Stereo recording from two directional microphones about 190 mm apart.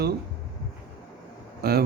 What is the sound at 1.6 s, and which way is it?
Speech, 55° right (ahead or behind).